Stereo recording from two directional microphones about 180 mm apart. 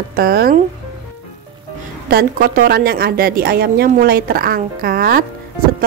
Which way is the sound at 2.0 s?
50° right (ahead or behind).